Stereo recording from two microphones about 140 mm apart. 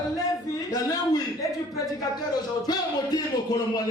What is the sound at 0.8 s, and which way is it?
Music, 25° left (ahead or behind).